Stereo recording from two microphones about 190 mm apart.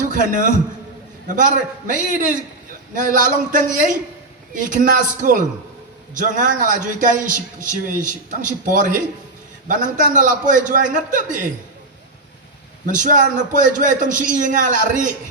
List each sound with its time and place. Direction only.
0.0 s a man's voice: 45° right (ahead or behind)
12.8 s a man's voice: 45° right (ahead or behind)